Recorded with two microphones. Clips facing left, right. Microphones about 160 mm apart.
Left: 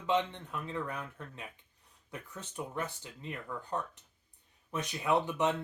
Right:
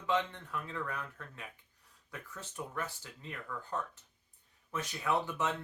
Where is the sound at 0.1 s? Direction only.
20° left (ahead or behind).